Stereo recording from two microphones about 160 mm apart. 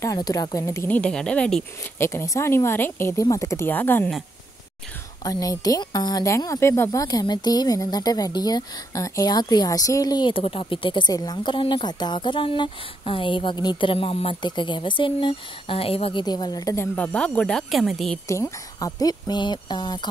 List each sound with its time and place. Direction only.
0.0 s speech: 20° left (ahead or behind)
2.0 s speech: 15° left (ahead or behind)
5.2 s speech: 20° left (ahead or behind); by 18.2 s centre (ahead or behind)
18.3 s speech: 20° left (ahead or behind)